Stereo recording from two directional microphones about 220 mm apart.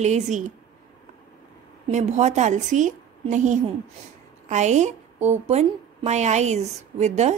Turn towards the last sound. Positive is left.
turn(degrees=-30)  # may be behind; listen again after turning